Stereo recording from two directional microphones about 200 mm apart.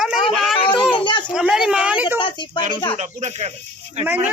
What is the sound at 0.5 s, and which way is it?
Speech, 25° left (ahead or behind).